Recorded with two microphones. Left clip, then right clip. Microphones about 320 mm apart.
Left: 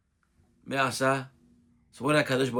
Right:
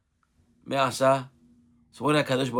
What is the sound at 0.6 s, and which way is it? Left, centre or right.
Speech, centre.